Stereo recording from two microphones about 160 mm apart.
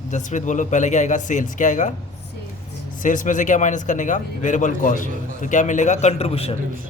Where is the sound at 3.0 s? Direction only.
55° left (ahead or behind).